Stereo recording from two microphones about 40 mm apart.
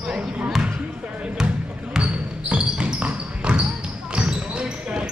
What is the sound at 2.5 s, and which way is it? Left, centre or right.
Basketball bounce, right.